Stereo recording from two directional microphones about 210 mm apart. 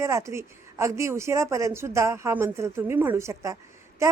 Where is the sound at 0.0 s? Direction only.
15° right (ahead or behind).